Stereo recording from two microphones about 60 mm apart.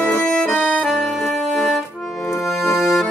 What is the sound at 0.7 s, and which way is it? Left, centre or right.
Music, centre.